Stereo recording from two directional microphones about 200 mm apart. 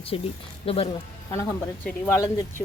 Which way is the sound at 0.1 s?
25° left (ahead or behind).